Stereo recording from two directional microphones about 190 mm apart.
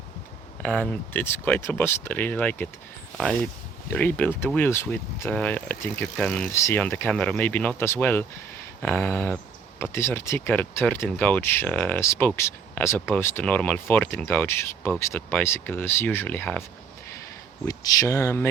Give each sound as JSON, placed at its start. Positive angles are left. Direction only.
{"t": 0.6, "sound": "speech", "side_deg": 5}
{"t": 3.8, "sound": "speech", "side_deg": 10}
{"t": 17.7, "sound": "speech", "side_deg": 20}